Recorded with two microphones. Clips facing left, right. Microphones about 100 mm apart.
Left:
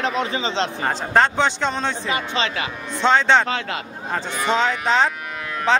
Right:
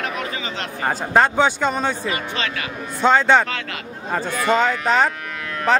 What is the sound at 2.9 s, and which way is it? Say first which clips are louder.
Speech: right 1 dB; 5° right (ahead or behind).